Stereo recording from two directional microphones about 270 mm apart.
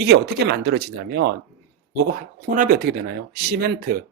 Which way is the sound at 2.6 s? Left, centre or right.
Right.